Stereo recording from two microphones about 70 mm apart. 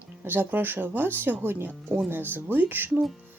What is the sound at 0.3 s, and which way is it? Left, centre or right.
Speech, right.